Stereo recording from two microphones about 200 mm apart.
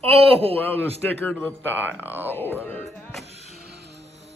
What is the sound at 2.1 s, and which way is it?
Speech, 10° right (ahead or behind).